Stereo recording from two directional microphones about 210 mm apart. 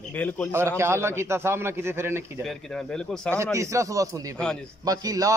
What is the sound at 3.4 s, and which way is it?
Speech, 15° right (ahead or behind).